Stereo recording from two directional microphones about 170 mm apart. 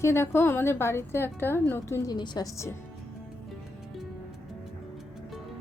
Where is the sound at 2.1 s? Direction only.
25° left (ahead or behind).